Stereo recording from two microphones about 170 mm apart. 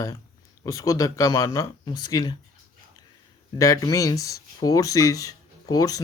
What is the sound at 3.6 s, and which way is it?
Speech, 20° left (ahead or behind).